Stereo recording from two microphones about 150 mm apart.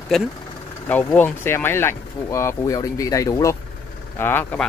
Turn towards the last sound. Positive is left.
turn(degrees=15)  # may be behind; listen again after turning